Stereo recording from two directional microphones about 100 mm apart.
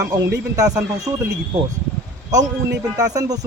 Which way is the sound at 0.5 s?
35° right (ahead or behind).